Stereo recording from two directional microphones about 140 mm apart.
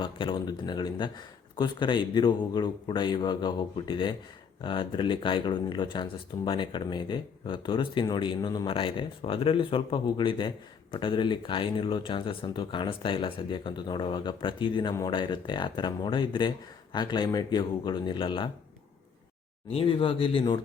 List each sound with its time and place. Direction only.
0.0 s speech: 35° left (ahead or behind)
19.7 s speech: 40° left (ahead or behind)